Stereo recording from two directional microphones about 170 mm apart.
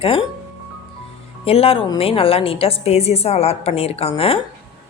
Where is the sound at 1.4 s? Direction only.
35° left (ahead or behind).